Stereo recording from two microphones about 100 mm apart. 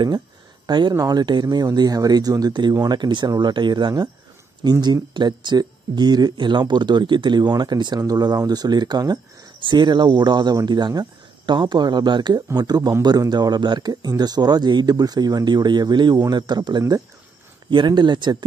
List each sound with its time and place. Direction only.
0.7 s speech: 45° right (ahead or behind)